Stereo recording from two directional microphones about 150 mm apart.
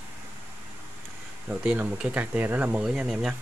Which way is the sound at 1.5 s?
10° right (ahead or behind).